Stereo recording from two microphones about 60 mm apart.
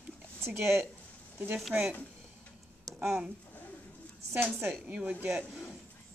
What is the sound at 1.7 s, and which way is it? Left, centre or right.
Speech, centre.